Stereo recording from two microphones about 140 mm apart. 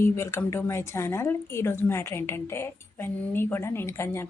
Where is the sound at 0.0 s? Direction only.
20° left (ahead or behind).